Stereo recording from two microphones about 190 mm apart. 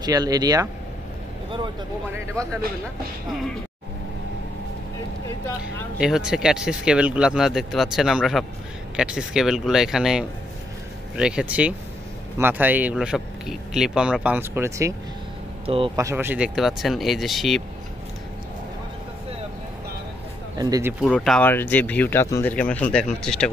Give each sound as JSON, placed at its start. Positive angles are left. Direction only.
{"t": 0.0, "sound": "speech", "side_deg": -20}
{"t": 5.9, "sound": "speech", "side_deg": -5}
{"t": 15.6, "sound": "speech", "side_deg": -30}
{"t": 16.0, "sound": "speech", "side_deg": -15}
{"t": 20.5, "sound": "speech", "side_deg": -20}
{"t": 21.0, "sound": "speech", "side_deg": 0}